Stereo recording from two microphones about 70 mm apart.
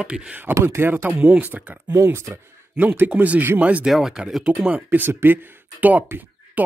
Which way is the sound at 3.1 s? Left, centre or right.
Right.